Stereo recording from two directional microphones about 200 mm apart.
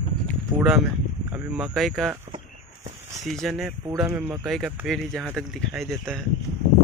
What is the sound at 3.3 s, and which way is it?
Speech, centre (ahead or behind).